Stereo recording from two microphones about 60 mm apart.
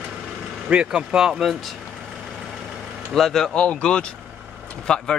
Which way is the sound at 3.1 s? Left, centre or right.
Centre.